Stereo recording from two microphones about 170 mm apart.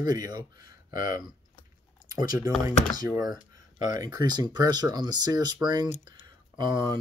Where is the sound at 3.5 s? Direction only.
20° right (ahead or behind).